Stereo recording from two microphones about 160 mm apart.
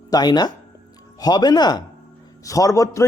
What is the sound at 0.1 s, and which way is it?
Speech, 25° left (ahead or behind).